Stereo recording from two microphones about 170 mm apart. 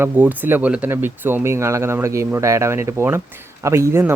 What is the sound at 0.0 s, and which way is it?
Speech, 10° right (ahead or behind).